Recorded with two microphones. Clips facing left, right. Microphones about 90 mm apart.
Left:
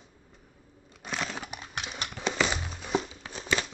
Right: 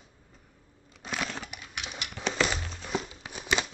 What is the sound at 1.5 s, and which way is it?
Horse, 35° left (ahead or behind).